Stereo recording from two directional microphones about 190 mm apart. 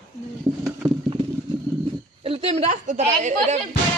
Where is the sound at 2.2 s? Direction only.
30° right (ahead or behind).